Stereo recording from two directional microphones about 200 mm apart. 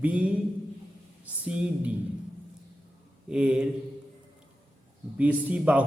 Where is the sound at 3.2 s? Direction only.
5° right (ahead or behind).